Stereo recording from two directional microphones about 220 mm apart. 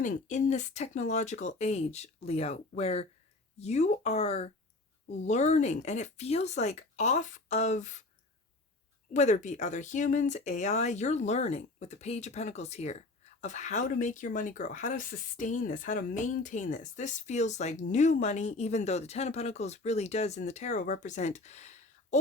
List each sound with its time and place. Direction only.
0.0 s speech: 35° left (ahead or behind)
9.1 s speech: 30° left (ahead or behind)